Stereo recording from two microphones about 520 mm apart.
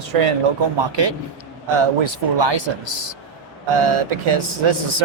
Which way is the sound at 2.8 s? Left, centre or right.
Right.